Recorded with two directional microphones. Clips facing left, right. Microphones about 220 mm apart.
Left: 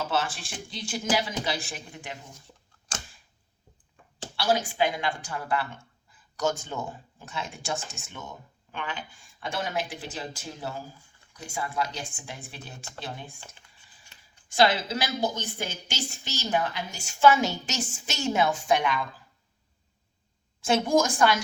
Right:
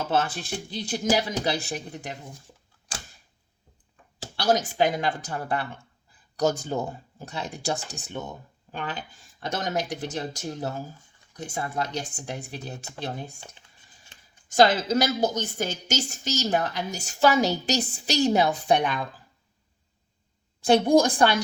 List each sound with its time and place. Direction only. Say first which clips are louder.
0.3 s a woman's voice: right 6 dB; 40° right (ahead or behind)
4.4 s a woman's voice: right 3 dB; 40° right (ahead or behind)
14.5 s a woman's voice: right 4 dB; 45° right (ahead or behind)
20.6 s a woman's voice: right 5 dB; 35° right (ahead or behind)